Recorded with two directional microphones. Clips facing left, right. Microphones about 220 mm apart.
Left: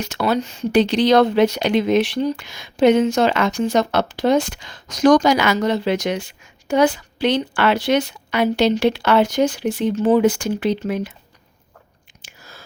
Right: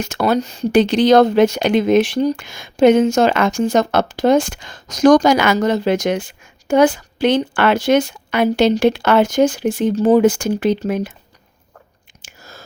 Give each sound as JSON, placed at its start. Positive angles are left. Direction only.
{"t": 0.0, "sound": "speech", "side_deg": -50}
{"t": 12.2, "sound": "chewing", "side_deg": -45}